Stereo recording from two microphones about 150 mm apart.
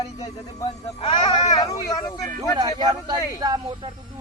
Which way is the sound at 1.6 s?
20° left (ahead or behind).